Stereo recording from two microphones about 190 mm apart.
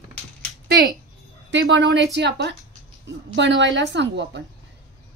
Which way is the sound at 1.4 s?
80° right.